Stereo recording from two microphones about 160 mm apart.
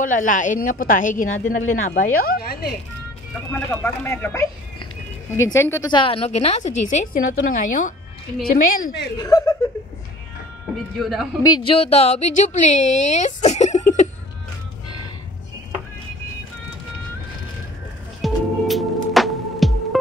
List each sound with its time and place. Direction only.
0.0 s speech: 55° left (ahead or behind); by 2.7 s 75° left (ahead or behind)
3.5 s speech: 10° left (ahead or behind)
5.9 s a woman's voice: 30° left (ahead or behind); by 7.9 s 50° left (ahead or behind)
8.4 s a woman's voice: 80° left
9.1 s speech: 25° left (ahead or behind)
11.0 s a woman's voice: centre (ahead or behind)
11.4 s speech: 25° left (ahead or behind)
11.7 s speech: 40° left (ahead or behind)
18.2 s music: centre (ahead or behind)